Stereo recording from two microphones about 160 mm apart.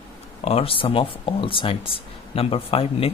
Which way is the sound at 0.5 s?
35° left (ahead or behind).